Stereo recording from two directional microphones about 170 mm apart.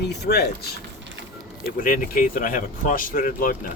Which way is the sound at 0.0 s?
75° left (ahead or behind).